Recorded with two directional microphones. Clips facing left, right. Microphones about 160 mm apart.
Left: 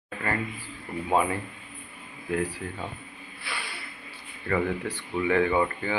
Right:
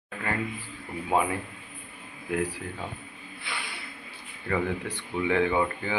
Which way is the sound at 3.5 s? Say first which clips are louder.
Left 1 dB; 20° right (ahead or behind).